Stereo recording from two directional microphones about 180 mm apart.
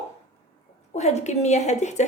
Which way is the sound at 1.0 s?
40° left (ahead or behind).